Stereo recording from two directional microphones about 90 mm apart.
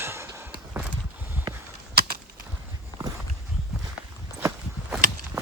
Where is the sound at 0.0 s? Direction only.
30° right (ahead or behind).